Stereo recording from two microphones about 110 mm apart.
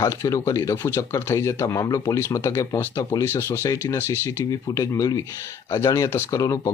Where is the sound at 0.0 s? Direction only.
30° left (ahead or behind).